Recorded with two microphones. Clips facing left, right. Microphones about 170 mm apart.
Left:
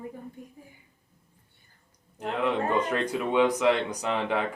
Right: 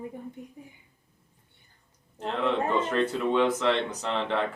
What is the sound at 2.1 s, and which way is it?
Speech, 10° left (ahead or behind).